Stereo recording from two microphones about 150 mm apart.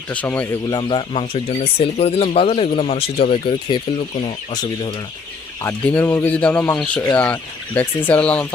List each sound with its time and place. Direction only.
0.1 s speech: 10° left (ahead or behind)
0.7 s speech: 30° left (ahead or behind)
5.6 s speech: 10° left (ahead or behind)